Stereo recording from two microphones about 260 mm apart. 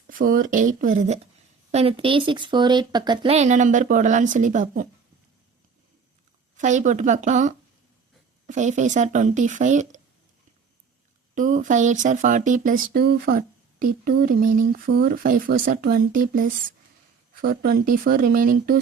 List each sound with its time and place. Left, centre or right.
0.1 s speech: right
6.6 s speech: right
11.3 s speech: right